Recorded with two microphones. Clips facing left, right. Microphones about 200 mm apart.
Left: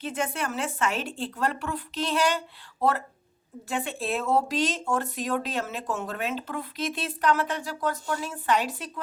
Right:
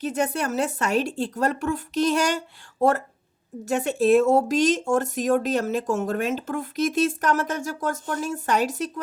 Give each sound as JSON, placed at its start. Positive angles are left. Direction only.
{"t": 0.0, "sound": "speech", "side_deg": -40}
{"t": 3.7, "sound": "speech", "side_deg": -45}